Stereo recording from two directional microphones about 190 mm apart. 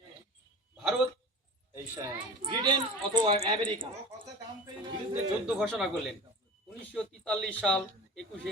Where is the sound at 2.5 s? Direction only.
25° right (ahead or behind).